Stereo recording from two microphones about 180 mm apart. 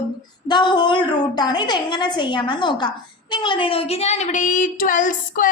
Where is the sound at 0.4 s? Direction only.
25° left (ahead or behind).